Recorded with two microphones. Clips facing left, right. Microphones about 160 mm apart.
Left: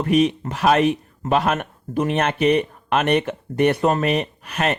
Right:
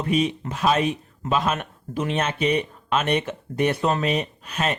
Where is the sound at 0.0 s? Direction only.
60° left (ahead or behind).